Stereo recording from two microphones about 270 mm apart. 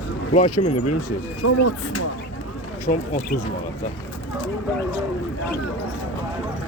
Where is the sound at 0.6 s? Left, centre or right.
Left.